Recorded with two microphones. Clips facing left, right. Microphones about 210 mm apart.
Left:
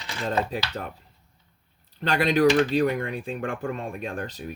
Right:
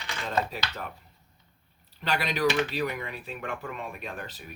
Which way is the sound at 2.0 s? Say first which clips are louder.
Left 7 dB; 50° left (ahead or behind).